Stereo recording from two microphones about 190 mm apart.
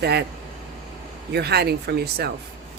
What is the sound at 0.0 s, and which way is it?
Speech, 60° right (ahead or behind).